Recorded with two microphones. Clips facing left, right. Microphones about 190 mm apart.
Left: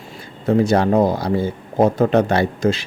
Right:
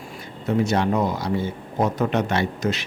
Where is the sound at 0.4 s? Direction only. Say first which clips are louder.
Left 5 dB; 35° left (ahead or behind).